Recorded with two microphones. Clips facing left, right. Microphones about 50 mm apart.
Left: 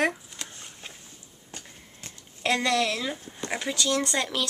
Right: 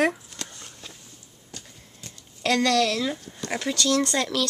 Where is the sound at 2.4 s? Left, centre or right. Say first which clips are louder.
Right 3 dB; centre.